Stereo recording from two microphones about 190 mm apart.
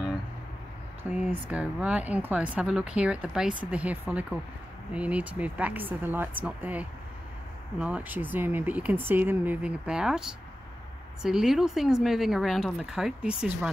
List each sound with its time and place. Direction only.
1.1 s speech: 5° right (ahead or behind)
11.2 s speech: centre (ahead or behind)